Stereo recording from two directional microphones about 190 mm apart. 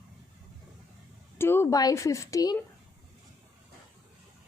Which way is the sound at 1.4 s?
10° left (ahead or behind).